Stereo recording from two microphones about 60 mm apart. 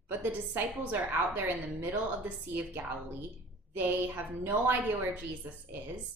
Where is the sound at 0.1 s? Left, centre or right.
Right.